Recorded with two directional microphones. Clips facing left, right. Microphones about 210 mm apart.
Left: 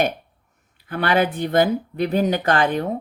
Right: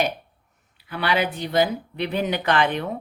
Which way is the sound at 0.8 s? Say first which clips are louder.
Left 4 dB; 50° left (ahead or behind).